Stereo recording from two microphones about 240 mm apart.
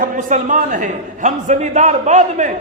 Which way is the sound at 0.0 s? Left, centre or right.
Right.